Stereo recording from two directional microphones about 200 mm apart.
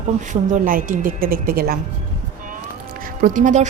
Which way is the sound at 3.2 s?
40° right (ahead or behind).